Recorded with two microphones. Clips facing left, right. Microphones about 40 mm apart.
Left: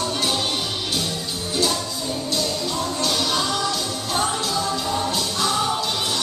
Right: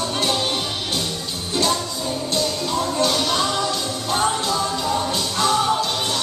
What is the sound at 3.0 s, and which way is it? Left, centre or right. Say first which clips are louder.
Music: right 1 dB; centre.